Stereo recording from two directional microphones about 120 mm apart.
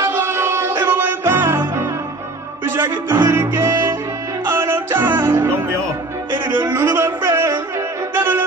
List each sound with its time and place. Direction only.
0.0 s music: 20° right (ahead or behind)